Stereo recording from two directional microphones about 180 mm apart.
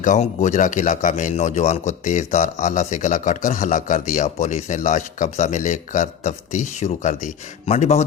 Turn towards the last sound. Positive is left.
turn(degrees=35)  # may be behind; listen again after turning